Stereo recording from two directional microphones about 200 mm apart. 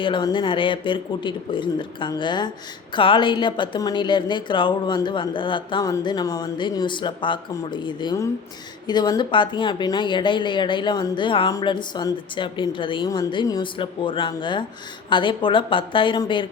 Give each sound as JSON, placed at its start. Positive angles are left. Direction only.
{"t": 0.0, "sound": "a woman's voice", "side_deg": 25}